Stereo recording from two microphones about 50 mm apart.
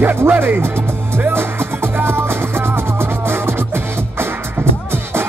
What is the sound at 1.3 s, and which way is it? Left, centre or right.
Music, right.